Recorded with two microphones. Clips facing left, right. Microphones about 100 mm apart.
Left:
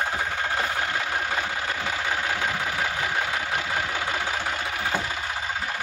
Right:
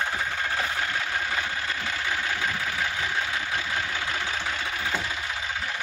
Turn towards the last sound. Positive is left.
turn(degrees=50)  # may be behind; listen again after turning